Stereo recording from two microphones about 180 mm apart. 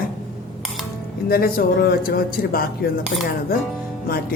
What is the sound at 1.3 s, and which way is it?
Speech, 55° left (ahead or behind).